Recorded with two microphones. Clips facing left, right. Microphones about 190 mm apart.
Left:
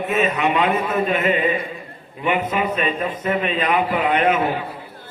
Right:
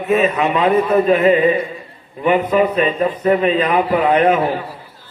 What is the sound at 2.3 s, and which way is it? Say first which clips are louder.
A man's voice: right 7 dB; 45° right (ahead or behind).